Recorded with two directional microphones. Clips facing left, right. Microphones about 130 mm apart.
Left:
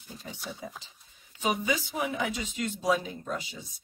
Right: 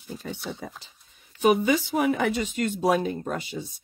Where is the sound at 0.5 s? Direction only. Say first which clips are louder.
Right 4 dB; 70° right (ahead or behind).